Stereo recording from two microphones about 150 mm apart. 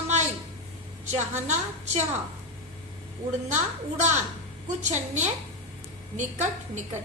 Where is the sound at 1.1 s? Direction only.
50° right (ahead or behind).